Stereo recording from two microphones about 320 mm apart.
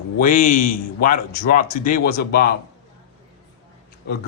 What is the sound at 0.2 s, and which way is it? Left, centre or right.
Speech, left.